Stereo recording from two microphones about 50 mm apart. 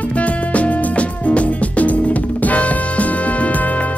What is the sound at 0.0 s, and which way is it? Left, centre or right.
Music, left.